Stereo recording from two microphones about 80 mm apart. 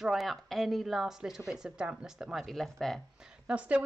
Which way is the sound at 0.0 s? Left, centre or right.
Centre.